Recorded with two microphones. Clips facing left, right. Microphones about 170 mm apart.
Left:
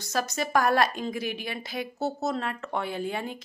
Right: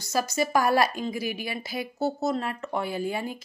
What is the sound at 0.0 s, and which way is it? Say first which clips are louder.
A woman's voice: right 3 dB; centre (ahead or behind).